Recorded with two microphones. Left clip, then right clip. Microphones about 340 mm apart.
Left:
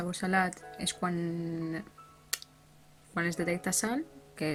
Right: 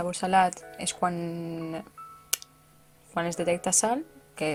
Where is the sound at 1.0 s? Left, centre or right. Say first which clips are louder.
Right 8 dB; right.